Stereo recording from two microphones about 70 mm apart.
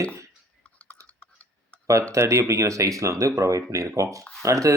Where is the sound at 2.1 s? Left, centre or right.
Right.